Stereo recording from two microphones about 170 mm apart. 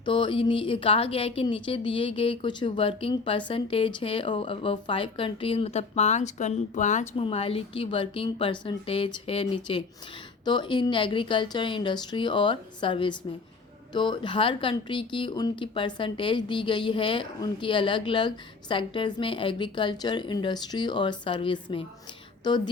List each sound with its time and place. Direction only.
0.0 s a woman's voice: 30° left (ahead or behind)